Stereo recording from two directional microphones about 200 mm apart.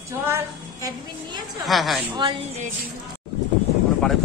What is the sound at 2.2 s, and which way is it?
Speech, 25° right (ahead or behind).